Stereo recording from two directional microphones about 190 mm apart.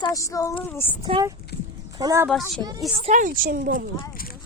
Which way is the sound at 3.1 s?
45° right (ahead or behind).